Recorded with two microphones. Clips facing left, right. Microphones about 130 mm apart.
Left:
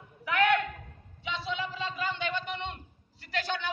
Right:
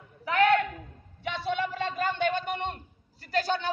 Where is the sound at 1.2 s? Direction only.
55° right (ahead or behind).